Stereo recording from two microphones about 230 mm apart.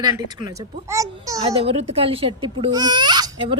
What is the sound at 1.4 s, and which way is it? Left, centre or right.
Speech, right.